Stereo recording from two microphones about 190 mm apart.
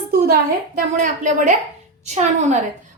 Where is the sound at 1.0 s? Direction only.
40° right (ahead or behind).